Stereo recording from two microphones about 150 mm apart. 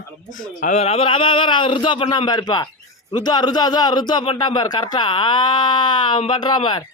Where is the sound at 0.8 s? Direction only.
40° left (ahead or behind).